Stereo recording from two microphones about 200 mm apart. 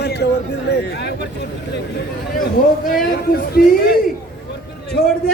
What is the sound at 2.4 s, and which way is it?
A man's voice, 45° left (ahead or behind).